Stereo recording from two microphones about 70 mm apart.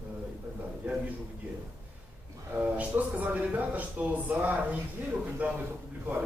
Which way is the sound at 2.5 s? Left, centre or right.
Right.